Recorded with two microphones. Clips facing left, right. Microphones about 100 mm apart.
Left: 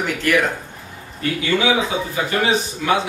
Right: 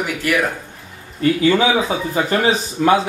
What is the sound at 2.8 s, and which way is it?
Speech, 45° right (ahead or behind).